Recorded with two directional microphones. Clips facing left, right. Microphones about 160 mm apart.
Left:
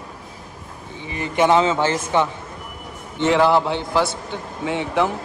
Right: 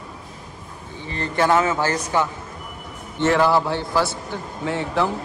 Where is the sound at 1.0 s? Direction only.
15° left (ahead or behind).